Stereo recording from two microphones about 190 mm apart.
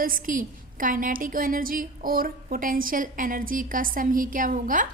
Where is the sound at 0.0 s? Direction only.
45° right (ahead or behind).